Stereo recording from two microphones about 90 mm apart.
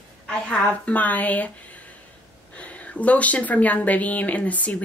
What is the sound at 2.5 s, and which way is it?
Speech, 15° left (ahead or behind).